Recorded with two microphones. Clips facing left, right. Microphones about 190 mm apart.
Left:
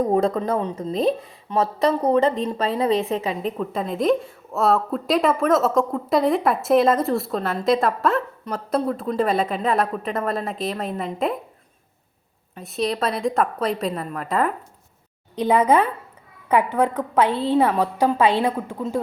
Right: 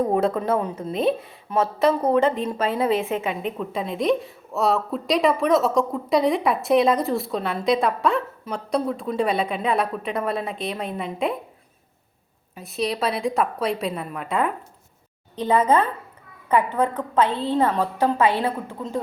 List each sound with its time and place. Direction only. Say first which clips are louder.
0.0 s speech: left 1 dB; centre (ahead or behind)
3.0 s a woman's voice: left 1 dB; 35° left (ahead or behind)
3.4 s speech: left 2 dB; centre (ahead or behind)
12.5 s speech: left 1 dB; centre (ahead or behind)
15.4 s a woman's voice: left 2 dB; 10° left (ahead or behind)